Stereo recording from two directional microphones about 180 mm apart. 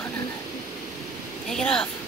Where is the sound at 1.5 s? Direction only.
5° left (ahead or behind).